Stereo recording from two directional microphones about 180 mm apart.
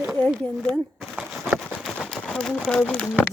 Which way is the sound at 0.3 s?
Centre (ahead or behind).